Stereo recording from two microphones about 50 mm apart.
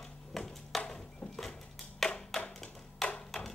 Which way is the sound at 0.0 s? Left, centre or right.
Centre.